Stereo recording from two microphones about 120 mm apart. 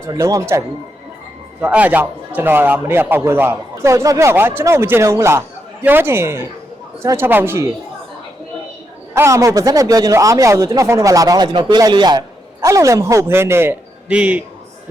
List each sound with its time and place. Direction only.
0.1 s a man's voice: 30° right (ahead or behind)
1.6 s a man's voice: 15° right (ahead or behind)
9.1 s a man's voice: 25° right (ahead or behind)
12.6 s a man's voice: 25° right (ahead or behind); by 14.4 s 10° right (ahead or behind)